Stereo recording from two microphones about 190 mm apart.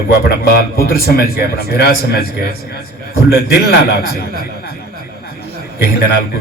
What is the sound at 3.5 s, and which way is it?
Speech, 55° left (ahead or behind).